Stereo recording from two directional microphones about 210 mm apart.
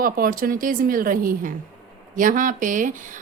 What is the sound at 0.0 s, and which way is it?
Speech, 45° right (ahead or behind).